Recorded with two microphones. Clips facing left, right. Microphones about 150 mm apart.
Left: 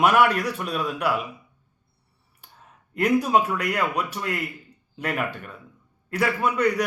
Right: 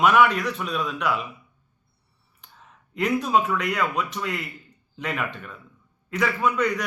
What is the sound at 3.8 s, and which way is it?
A man's voice, 10° left (ahead or behind).